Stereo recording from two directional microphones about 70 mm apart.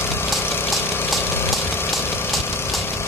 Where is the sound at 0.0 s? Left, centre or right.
Left.